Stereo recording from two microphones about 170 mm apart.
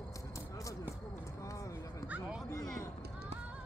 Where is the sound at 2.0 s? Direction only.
10° right (ahead or behind).